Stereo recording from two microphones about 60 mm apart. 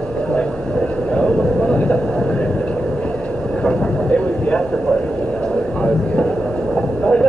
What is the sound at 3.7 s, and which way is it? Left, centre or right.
Vehicle, left.